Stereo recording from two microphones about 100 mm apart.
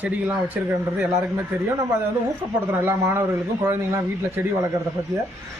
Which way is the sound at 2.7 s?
25° right (ahead or behind).